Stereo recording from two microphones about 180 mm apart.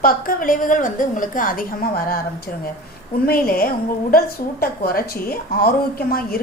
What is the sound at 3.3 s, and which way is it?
A woman's voice, 55° left (ahead or behind).